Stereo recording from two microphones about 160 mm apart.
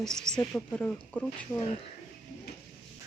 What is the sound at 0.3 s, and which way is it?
Speech, 10° left (ahead or behind).